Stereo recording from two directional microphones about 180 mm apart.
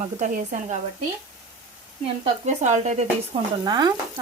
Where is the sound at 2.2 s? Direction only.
40° right (ahead or behind).